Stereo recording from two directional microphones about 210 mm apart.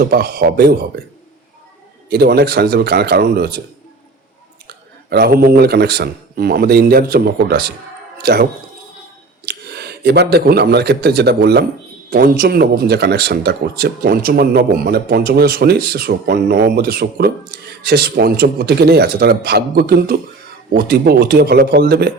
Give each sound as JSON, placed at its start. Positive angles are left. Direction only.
{"t": 0.0, "sound": "speech", "side_deg": -45}
{"t": 2.0, "sound": "speech", "side_deg": -50}
{"t": 5.0, "sound": "speech", "side_deg": -45}
{"t": 9.5, "sound": "speech", "side_deg": -50}